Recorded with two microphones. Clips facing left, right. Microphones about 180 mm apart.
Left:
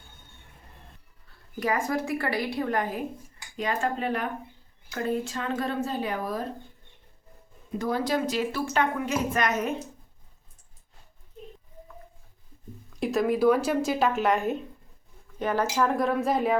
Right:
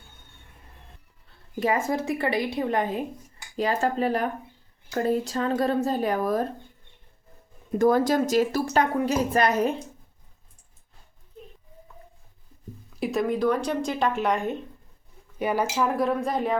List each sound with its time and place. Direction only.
1.5 s a woman's voice: 25° right (ahead or behind)
3.6 s a woman's voice: 35° right (ahead or behind)
7.7 s a woman's voice: 50° right (ahead or behind); by 9.8 s 30° right (ahead or behind)
13.0 s speech: centre (ahead or behind)
15.4 s speech: 10° right (ahead or behind)